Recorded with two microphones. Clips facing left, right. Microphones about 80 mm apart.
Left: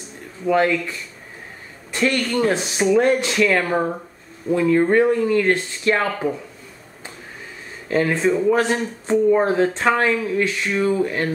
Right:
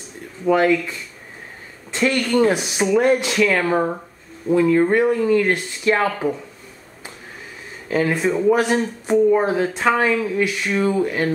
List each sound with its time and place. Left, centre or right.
0.5 s speech: centre
4.5 s speech: centre
7.9 s speech: centre